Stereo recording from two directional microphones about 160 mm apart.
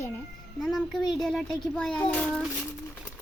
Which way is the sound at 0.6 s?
Centre (ahead or behind).